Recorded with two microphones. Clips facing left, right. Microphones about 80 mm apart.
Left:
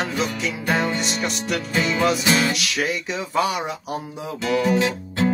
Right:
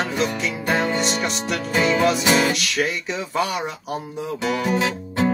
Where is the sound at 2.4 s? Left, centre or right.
Centre.